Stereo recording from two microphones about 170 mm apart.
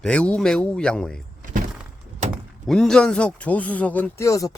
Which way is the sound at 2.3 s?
Centre (ahead or behind).